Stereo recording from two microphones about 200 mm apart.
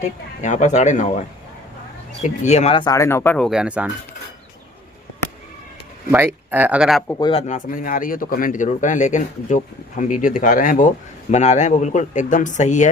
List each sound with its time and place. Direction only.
0.0 s a man's voice: 35° left (ahead or behind)
2.2 s speech: 35° left (ahead or behind); by 3.8 s 5° right (ahead or behind)
6.1 s speech: 10° right (ahead or behind)
7.2 s speech: 25° left (ahead or behind)
7.4 s a man's voice: 40° left (ahead or behind)